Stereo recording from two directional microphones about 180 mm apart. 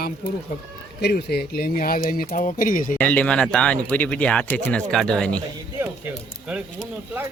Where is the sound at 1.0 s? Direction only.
65° left (ahead or behind); by 2.9 s 50° left (ahead or behind).